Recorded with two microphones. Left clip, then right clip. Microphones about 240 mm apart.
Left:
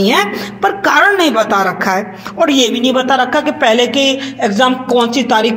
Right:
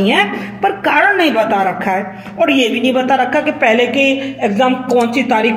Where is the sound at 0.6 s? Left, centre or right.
Left.